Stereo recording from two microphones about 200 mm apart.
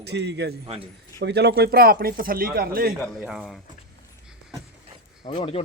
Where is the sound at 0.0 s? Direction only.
55° right (ahead or behind).